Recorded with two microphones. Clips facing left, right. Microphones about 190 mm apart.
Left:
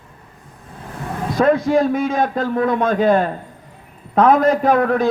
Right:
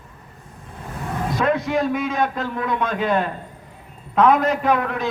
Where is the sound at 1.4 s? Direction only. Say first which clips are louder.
Left 6 dB; 35° left (ahead or behind).